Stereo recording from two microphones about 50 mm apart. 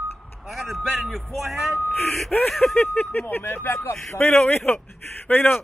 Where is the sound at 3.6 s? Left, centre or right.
Left.